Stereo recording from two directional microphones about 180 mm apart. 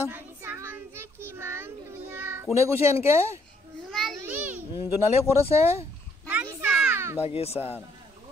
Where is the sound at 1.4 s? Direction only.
15° right (ahead or behind).